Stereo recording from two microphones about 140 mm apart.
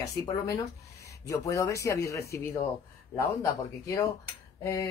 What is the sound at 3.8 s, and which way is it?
Speech, 20° left (ahead or behind).